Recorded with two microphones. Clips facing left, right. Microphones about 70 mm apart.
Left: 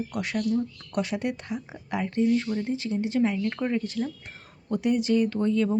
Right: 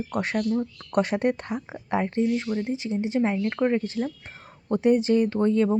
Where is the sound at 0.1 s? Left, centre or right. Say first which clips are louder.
Right 3 dB; right.